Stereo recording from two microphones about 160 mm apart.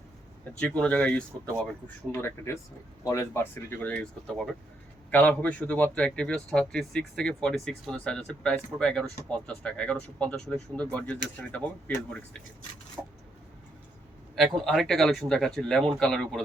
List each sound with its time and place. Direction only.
0.6 s speech: 10° left (ahead or behind)
2.1 s a man's voice: 15° left (ahead or behind)
13.0 s a sound: 10° right (ahead or behind)
14.3 s a man's voice: centre (ahead or behind)